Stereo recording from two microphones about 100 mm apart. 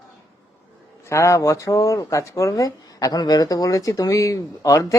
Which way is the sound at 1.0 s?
30° left (ahead or behind).